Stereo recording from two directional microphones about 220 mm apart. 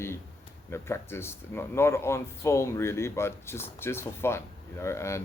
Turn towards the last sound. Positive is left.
turn(degrees=10)  # may be behind; listen again after turning